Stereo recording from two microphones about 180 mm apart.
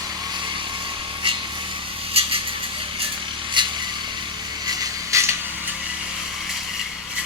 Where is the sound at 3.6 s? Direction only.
25° right (ahead or behind).